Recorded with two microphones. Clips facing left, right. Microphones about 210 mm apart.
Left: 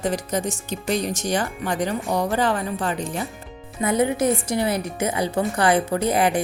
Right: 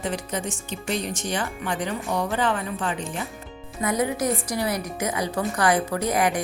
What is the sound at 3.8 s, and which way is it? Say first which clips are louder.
A woman's voice: left 4 dB; 25° left (ahead or behind).